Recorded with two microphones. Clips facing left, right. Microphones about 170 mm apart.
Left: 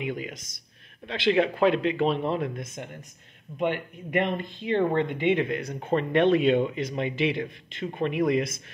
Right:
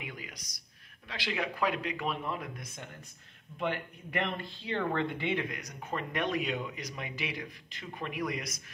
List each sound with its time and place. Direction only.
0.0 s speech: 25° left (ahead or behind)